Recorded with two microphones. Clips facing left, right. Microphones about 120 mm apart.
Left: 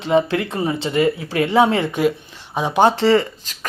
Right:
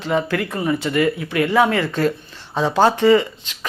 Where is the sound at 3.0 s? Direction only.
35° left (ahead or behind).